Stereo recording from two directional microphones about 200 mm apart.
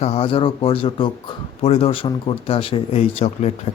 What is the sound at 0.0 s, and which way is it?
Speech, 30° left (ahead or behind).